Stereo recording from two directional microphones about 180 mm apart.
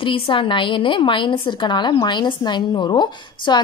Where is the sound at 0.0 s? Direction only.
30° left (ahead or behind).